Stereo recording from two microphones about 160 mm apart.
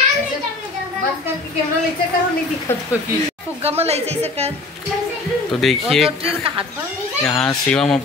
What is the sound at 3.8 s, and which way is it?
Speech, 40° right (ahead or behind).